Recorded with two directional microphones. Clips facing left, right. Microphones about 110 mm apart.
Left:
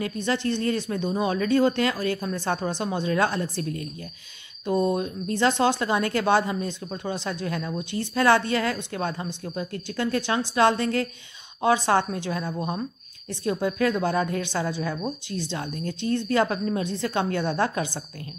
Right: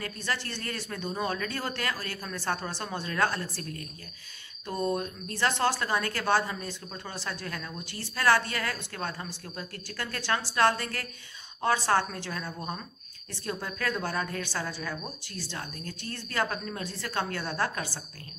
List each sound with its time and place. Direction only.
0.0 s speech: 20° left (ahead or behind)